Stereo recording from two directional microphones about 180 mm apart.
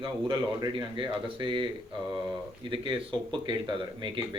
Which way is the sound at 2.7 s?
30° right (ahead or behind).